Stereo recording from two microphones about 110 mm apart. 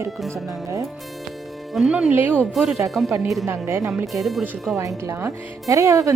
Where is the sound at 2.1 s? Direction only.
15° right (ahead or behind).